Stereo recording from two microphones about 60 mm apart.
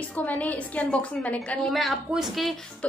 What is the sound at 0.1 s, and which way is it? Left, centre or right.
A woman's voice, left.